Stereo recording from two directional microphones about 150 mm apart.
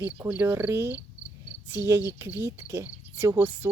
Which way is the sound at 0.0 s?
15° right (ahead or behind).